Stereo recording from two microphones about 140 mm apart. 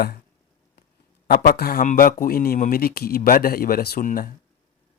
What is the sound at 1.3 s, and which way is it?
A man's voice, 90° left.